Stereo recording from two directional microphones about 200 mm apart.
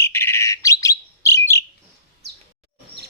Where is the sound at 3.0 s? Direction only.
55° right (ahead or behind).